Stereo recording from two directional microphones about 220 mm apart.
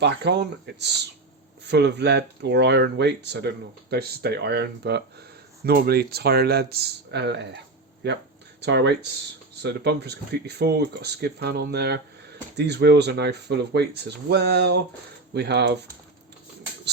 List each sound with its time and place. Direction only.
0.0 s speech: 50° right (ahead or behind)
8.6 s speech: 50° right (ahead or behind)